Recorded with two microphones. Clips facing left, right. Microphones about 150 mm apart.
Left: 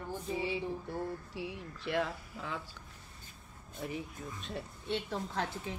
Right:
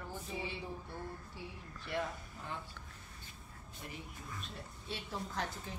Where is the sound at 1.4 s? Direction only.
90° left.